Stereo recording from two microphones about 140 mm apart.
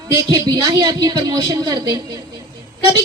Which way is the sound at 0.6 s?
25° right (ahead or behind).